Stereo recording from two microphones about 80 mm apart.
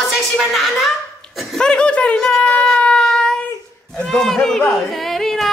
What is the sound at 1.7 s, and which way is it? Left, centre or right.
Speech, centre.